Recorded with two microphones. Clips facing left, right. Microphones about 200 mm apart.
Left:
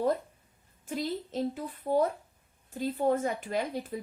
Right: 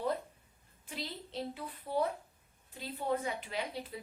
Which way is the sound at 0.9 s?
45° left (ahead or behind).